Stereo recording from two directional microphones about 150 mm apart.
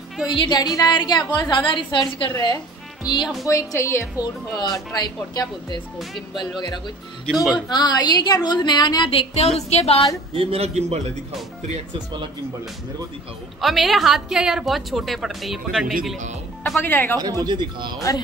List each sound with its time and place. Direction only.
0.3 s a woman's voice: 30° left (ahead or behind)
7.2 s a woman's voice: centre (ahead or behind)
7.5 s a woman's voice: 30° left (ahead or behind); by 10.0 s 45° left (ahead or behind)
10.3 s speech: 40° right (ahead or behind)
13.6 s a woman's voice: centre (ahead or behind)
16.8 s speech: 15° left (ahead or behind)
17.2 s speech: 25° right (ahead or behind)